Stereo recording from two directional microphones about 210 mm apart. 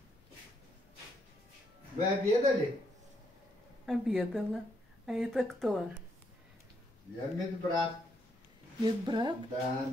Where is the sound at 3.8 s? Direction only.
Centre (ahead or behind).